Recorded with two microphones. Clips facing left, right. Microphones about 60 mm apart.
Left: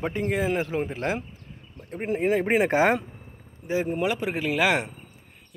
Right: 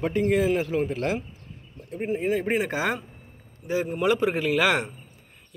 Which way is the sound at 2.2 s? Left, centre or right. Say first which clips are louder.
Left 4 dB; left.